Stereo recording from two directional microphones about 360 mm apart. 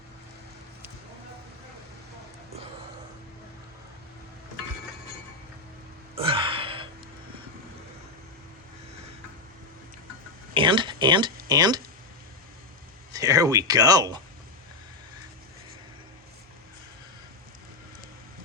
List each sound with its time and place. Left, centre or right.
6.1 s a sound: centre
10.5 s speech: centre
13.1 s speech: centre